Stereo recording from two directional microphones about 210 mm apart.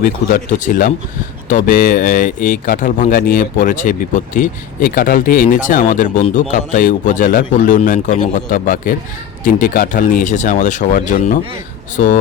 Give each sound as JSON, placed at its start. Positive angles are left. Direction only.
{"t": 0.0, "sound": "speech", "side_deg": 40}